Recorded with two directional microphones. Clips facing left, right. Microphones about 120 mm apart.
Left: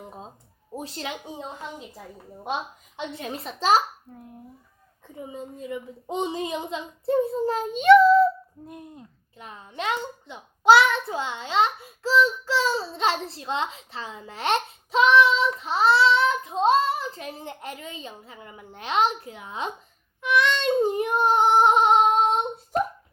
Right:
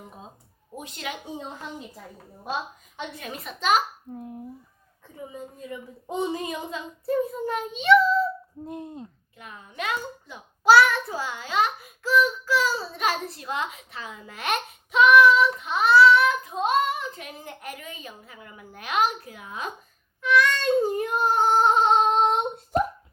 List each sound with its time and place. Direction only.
0.8 s a child's voice: 35° left (ahead or behind)
3.2 s a child's voice: 30° left (ahead or behind)
4.1 s speech: 20° right (ahead or behind)
5.3 s a child's voice: 25° left (ahead or behind); by 8.3 s 45° left (ahead or behind)
8.6 s speech: 25° right (ahead or behind)
9.4 s a child's voice: 30° left (ahead or behind); by 22.0 s 15° left (ahead or behind)